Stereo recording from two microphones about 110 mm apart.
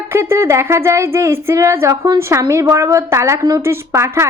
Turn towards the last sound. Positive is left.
turn(degrees=-25)  # may be behind; listen again after turning